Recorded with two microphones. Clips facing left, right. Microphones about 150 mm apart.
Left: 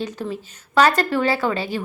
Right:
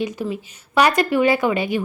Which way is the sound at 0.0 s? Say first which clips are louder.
Right 3 dB; 10° right (ahead or behind).